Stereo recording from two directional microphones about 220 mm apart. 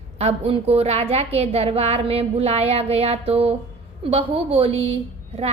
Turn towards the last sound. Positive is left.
turn(degrees=-25)  # may be behind; listen again after turning